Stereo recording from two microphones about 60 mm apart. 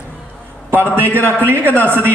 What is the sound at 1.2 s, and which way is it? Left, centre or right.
Speech, right.